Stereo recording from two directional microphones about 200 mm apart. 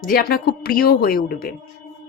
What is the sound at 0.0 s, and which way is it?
A woman's voice, 45° left (ahead or behind).